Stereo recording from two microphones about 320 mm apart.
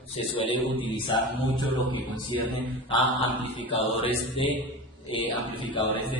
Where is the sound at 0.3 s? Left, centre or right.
Centre.